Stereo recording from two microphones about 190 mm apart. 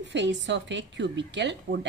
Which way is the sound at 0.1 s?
70° right (ahead or behind).